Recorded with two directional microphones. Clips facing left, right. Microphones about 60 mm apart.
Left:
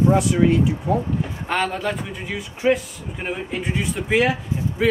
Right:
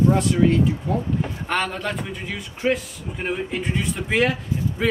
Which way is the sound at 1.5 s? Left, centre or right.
Centre.